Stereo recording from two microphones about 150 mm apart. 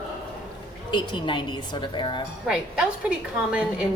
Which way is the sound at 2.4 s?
5° right (ahead or behind).